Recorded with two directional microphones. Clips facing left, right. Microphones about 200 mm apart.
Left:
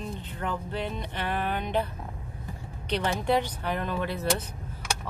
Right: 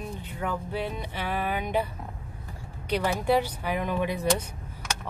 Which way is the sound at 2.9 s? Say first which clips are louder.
Right 1 dB; 10° right (ahead or behind).